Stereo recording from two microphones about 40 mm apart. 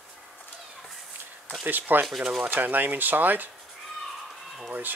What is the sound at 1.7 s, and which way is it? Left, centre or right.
Speech, right.